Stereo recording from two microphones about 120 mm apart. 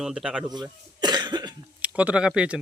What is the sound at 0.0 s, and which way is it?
Speech, 5° right (ahead or behind).